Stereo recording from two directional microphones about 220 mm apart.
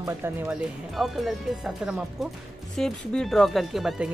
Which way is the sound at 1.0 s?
Centre (ahead or behind).